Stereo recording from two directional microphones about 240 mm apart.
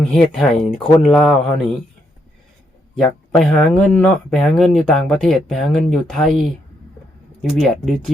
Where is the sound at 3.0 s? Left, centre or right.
Centre.